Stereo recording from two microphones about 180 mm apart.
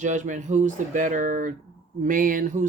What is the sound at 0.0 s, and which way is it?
Speech, 45° right (ahead or behind).